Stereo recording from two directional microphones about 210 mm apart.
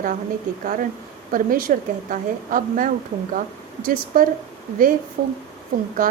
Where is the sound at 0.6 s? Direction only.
40° right (ahead or behind).